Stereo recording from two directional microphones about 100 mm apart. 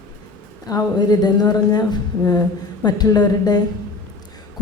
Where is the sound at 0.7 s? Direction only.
40° left (ahead or behind).